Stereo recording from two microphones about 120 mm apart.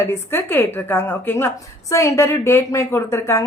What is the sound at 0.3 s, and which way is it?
A woman's voice, 20° left (ahead or behind).